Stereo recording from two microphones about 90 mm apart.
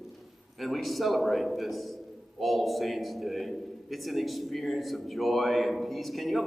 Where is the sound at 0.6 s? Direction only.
Centre (ahead or behind).